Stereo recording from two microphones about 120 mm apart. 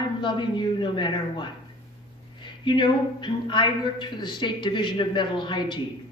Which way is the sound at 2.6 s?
40° left (ahead or behind).